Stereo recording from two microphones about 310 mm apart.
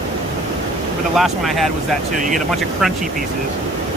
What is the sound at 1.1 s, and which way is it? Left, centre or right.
Speech, centre.